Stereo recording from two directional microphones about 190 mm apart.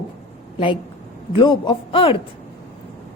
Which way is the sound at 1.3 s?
25° left (ahead or behind).